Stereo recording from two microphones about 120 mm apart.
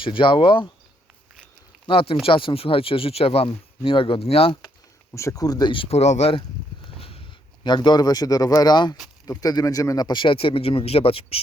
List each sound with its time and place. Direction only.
0.0 s speech: 45° left (ahead or behind)
1.9 s speech: 50° left (ahead or behind)
5.1 s speech: 25° left (ahead or behind); by 6.0 s 45° left (ahead or behind)
6.0 s speech: 65° left (ahead or behind)
7.0 s speech: 50° left (ahead or behind)